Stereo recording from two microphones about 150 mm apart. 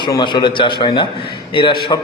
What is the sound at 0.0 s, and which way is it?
A man's voice, 30° left (ahead or behind).